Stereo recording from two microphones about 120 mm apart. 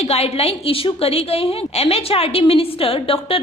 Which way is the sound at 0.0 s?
55° left (ahead or behind).